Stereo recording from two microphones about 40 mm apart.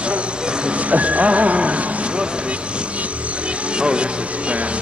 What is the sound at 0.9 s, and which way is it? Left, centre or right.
Music, right.